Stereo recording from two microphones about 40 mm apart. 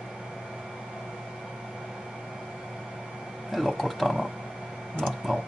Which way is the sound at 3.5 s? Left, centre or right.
Centre.